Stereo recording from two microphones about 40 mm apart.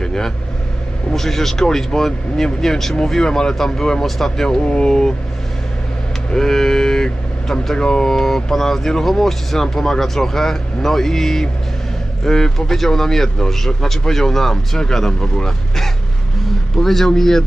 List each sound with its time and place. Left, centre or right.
0.0 s vehicle: centre
1.1 s speech: centre
4.6 s speech: left
6.3 s speech: centre